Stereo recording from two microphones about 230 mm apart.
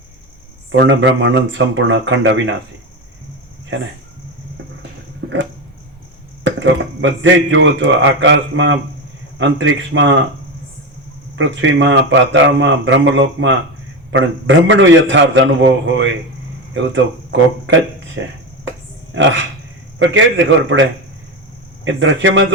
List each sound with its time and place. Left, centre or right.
0.7 s speech: right
6.4 s speech: right
11.3 s speech: right
18.2 s speech: right
21.8 s speech: right